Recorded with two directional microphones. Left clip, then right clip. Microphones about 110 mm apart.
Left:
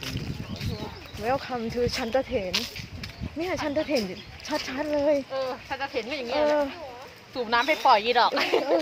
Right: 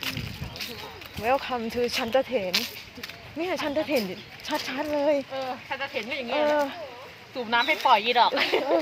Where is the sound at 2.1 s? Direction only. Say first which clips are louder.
Right 2 dB; centre (ahead or behind).